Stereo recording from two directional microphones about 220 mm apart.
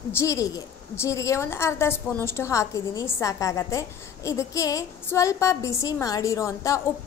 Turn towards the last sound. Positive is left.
turn(degrees=15)  # may be behind; listen again after turning